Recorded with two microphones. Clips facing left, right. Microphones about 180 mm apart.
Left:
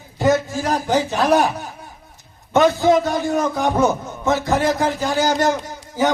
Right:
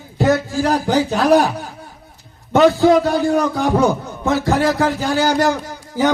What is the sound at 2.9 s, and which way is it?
Speech, 20° left (ahead or behind).